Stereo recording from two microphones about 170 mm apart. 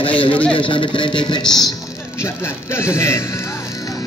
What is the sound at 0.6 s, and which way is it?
Speech, 30° left (ahead or behind).